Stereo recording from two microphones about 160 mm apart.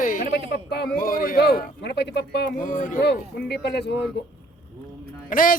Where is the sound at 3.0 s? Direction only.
90° left.